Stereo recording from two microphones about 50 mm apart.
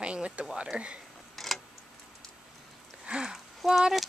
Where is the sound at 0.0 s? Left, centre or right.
Right.